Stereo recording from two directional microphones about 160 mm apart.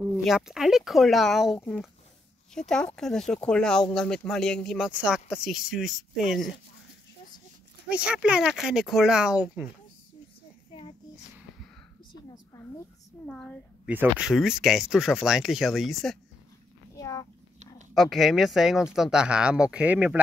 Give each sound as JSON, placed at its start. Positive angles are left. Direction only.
{"t": 0.2, "sound": "speech", "side_deg": -5}
{"t": 7.9, "sound": "speech", "side_deg": -5}
{"t": 13.3, "sound": "speech", "side_deg": 5}
{"t": 13.8, "sound": "speech", "side_deg": -10}
{"t": 16.9, "sound": "a sound", "side_deg": 20}
{"t": 17.9, "sound": "speech", "side_deg": 0}